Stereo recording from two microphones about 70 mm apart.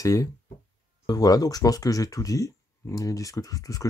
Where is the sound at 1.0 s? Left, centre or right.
Left.